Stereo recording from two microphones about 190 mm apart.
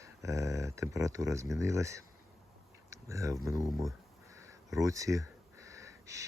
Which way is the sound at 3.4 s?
15° right (ahead or behind).